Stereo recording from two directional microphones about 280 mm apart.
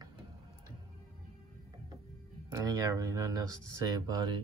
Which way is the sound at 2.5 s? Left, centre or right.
Centre.